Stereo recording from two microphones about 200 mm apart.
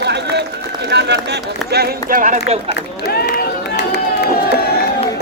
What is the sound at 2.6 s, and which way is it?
Run, 55° left (ahead or behind).